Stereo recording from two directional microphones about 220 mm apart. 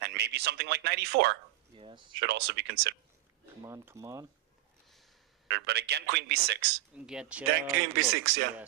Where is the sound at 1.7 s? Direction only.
20° right (ahead or behind).